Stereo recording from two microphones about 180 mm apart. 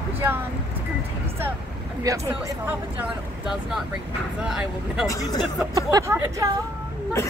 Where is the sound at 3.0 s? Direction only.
5° right (ahead or behind).